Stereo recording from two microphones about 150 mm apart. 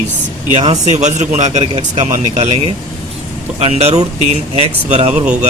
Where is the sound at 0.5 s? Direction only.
45° right (ahead or behind).